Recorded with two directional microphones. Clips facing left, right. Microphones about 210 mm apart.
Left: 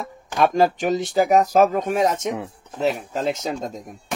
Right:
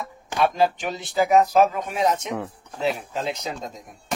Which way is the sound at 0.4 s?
45° left (ahead or behind).